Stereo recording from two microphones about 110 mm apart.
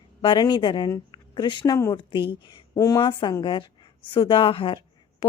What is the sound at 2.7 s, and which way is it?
Speech, 30° left (ahead or behind).